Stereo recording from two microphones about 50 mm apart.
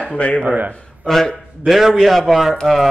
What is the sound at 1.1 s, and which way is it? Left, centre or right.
A man's voice, centre.